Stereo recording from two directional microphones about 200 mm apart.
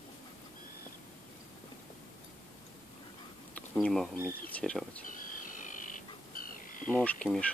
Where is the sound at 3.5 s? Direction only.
5° left (ahead or behind).